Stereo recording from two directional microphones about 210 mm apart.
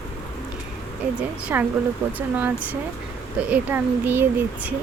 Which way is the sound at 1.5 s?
10° right (ahead or behind).